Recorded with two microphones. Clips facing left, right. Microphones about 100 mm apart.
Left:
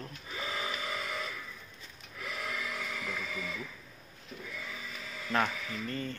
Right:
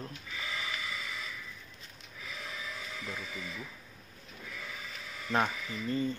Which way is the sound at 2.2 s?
80° left.